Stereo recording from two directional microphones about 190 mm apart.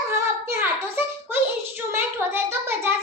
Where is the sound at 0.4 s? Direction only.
10° right (ahead or behind).